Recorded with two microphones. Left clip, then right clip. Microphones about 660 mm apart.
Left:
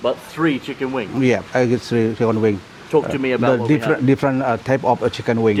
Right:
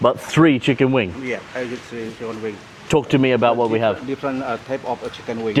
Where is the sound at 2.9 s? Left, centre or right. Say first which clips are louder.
Right 1 dB; right.